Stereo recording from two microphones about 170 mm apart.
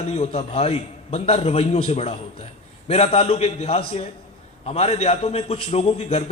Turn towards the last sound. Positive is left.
turn(degrees=40)  # may be behind; listen again after turning